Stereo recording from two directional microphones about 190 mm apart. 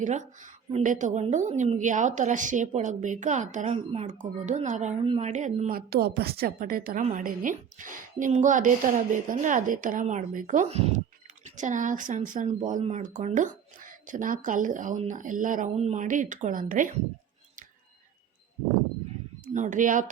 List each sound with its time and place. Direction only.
0.0 s a woman's voice: 40° right (ahead or behind)
5.7 s a woman's voice: 55° right (ahead or behind)
19.5 s a woman's voice: 40° right (ahead or behind)